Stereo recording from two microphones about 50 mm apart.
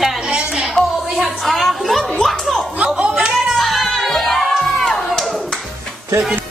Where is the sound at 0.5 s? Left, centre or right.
Centre.